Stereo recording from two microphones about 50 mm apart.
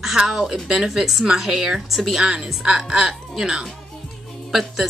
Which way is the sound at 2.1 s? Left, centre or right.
Centre.